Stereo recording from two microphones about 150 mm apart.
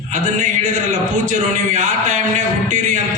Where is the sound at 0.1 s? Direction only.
55° right (ahead or behind).